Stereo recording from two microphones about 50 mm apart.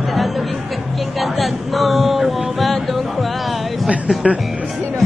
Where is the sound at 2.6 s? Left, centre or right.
Centre.